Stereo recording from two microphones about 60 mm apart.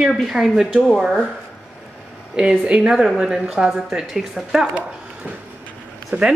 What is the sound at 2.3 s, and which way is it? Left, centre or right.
A woman's voice, centre.